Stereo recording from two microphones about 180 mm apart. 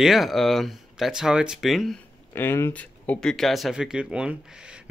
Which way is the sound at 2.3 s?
15° left (ahead or behind).